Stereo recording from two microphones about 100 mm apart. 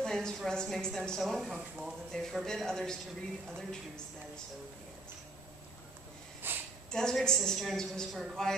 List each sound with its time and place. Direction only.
0.0 s speech: 5° left (ahead or behind)
6.4 s a sound: 20° right (ahead or behind)
6.9 s speech: 5° left (ahead or behind)